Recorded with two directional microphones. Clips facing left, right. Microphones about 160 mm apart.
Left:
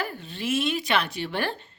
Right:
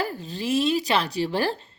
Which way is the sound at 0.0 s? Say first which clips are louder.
Right 3 dB; 35° right (ahead or behind).